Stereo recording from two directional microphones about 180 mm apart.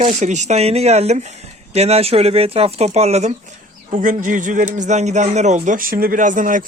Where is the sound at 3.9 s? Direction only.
45° right (ahead or behind).